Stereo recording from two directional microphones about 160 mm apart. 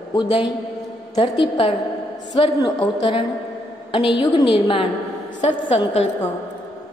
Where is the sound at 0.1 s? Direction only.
30° left (ahead or behind).